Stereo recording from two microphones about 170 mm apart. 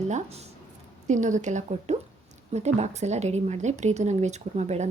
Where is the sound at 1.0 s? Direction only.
45° right (ahead or behind).